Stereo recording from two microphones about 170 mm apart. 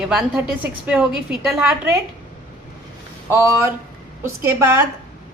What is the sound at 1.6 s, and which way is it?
Speech, 15° right (ahead or behind).